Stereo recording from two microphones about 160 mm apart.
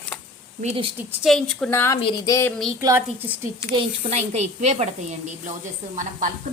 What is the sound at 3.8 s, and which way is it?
Speech, 45° right (ahead or behind).